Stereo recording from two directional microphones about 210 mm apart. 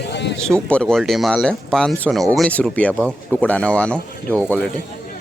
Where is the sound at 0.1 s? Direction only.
55° left (ahead or behind).